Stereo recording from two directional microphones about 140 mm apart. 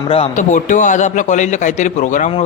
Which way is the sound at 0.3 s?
65° left (ahead or behind).